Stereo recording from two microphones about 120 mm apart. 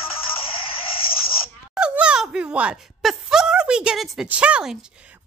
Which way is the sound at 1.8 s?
10° right (ahead or behind).